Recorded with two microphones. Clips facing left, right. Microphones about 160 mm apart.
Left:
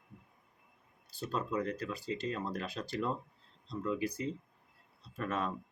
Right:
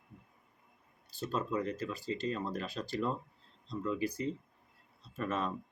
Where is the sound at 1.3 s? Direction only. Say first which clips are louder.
Even; 5° right (ahead or behind).